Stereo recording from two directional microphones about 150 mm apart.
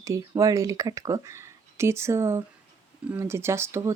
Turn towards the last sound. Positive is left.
turn(degrees=-20)  # may be behind; listen again after turning